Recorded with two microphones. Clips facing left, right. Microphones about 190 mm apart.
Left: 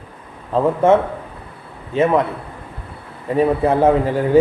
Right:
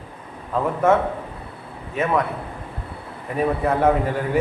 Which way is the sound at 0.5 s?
25° left (ahead or behind).